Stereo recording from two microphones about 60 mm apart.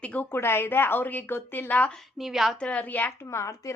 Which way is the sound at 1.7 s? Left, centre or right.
Left.